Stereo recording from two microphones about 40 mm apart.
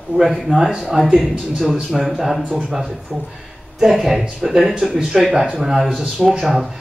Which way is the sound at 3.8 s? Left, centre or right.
Centre.